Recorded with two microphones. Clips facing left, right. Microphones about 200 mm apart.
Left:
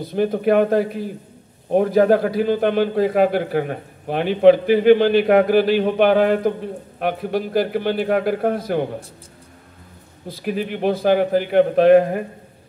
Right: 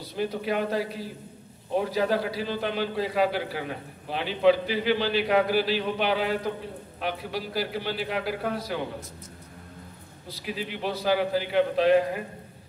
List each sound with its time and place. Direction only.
0.0 s a man's voice: 50° left (ahead or behind)
10.2 s a man's voice: 50° left (ahead or behind)